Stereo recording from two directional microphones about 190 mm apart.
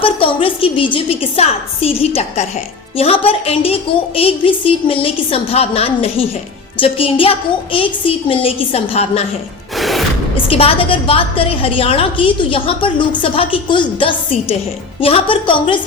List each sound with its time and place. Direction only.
0.0 s a woman's voice: 30° left (ahead or behind)
9.7 s music: centre (ahead or behind)
10.3 s a woman's voice: 30° left (ahead or behind)